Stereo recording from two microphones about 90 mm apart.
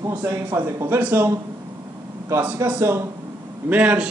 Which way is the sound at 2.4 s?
20° right (ahead or behind).